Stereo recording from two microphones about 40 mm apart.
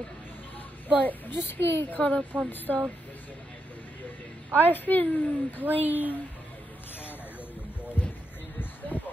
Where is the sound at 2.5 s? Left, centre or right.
Left.